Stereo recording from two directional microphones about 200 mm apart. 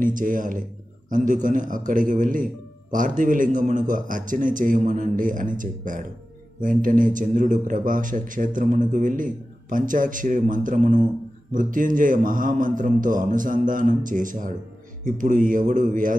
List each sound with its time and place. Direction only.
0.0 s speech: 40° right (ahead or behind)